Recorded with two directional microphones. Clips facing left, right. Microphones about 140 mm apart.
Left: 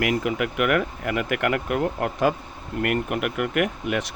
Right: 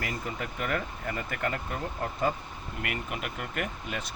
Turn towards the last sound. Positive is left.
turn(degrees=70)  # may be behind; listen again after turning